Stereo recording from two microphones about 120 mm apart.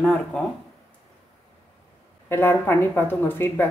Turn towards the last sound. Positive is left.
turn(degrees=15)  # may be behind; listen again after turning